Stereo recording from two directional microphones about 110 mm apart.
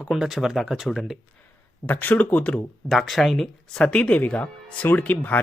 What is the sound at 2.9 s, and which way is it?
Speech, centre (ahead or behind).